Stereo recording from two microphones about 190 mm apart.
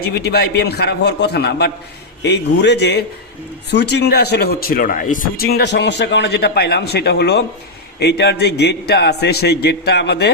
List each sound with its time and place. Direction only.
0.2 s speech: 60° left (ahead or behind)